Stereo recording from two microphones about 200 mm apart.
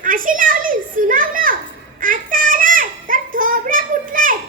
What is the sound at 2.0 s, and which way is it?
Child singing, 45° right (ahead or behind).